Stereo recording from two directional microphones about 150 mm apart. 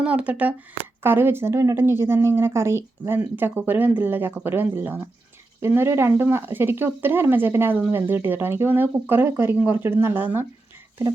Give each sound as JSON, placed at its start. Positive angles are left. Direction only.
{"t": 0.0, "sound": "speech", "side_deg": -10}